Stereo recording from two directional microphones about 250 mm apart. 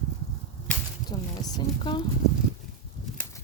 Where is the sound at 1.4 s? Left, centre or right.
Centre.